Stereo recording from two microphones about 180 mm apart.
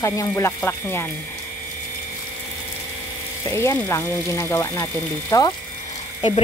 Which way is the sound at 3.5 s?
15° left (ahead or behind).